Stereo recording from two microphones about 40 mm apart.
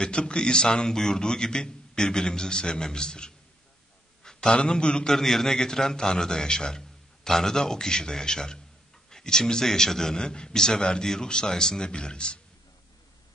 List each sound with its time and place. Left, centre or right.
0.0 s a man's voice: left
5.1 s a man's voice: centre